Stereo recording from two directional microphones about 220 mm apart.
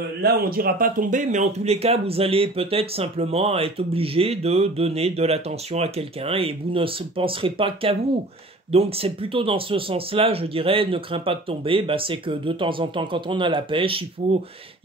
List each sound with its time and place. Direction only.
0.2 s speech: 45° right (ahead or behind); by 14.4 s 25° right (ahead or behind)